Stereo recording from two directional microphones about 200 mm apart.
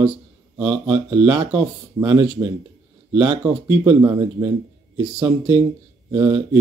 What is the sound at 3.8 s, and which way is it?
Speech, 15° right (ahead or behind).